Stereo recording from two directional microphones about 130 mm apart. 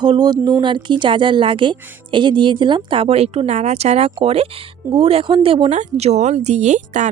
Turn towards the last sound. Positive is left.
turn(degrees=-65)  # may be behind; listen again after turning